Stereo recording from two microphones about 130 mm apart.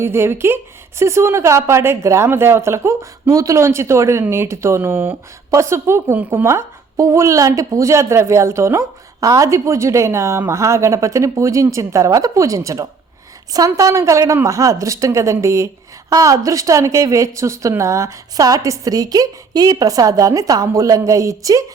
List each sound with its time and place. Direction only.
0.0 s a woman's voice: 20° right (ahead or behind)